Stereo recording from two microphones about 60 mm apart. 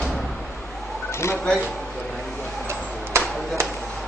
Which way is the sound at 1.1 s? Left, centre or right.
Left.